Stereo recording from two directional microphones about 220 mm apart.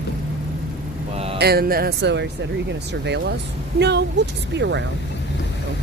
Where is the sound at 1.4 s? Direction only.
45° right (ahead or behind).